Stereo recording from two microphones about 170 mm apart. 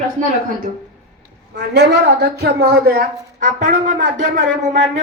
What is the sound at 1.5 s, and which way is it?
Speech, 80° right.